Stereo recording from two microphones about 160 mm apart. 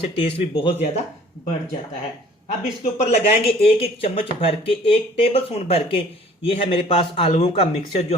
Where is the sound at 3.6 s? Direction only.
35° left (ahead or behind).